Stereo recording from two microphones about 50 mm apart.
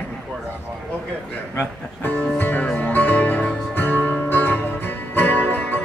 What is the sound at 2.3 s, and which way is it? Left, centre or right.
Music, left.